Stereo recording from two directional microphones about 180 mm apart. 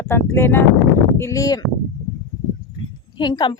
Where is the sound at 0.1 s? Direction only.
10° left (ahead or behind).